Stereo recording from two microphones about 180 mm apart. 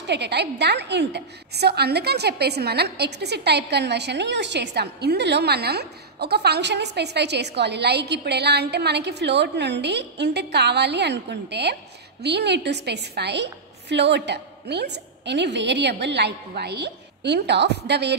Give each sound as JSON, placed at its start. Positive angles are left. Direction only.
{"t": 0.0, "sound": "a woman's voice", "side_deg": -70}